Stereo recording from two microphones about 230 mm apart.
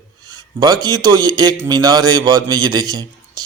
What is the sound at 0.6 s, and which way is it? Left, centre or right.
Speech, centre.